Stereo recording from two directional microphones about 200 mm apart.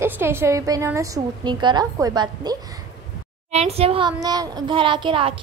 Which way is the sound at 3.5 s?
30° right (ahead or behind).